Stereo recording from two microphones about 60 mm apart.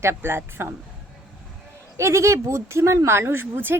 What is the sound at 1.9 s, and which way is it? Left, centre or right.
Speech, right.